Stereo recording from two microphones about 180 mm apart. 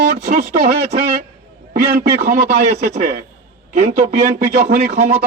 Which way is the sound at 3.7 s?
45° right (ahead or behind).